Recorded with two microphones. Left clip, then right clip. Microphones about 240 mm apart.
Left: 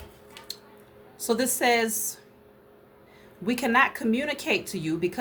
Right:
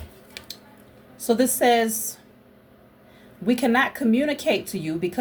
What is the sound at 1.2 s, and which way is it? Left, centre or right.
Speech, centre.